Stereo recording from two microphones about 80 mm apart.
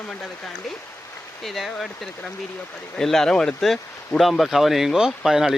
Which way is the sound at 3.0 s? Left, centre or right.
Centre.